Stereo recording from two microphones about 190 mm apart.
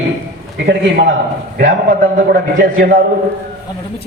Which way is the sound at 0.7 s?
65° right (ahead or behind).